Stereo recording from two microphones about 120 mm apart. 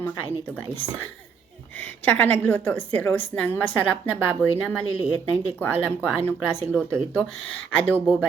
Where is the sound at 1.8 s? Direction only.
15° left (ahead or behind).